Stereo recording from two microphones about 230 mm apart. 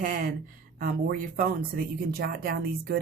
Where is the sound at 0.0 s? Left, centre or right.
Right.